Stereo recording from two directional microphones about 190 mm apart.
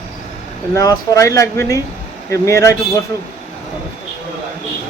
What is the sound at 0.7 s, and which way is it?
Speech, 15° left (ahead or behind).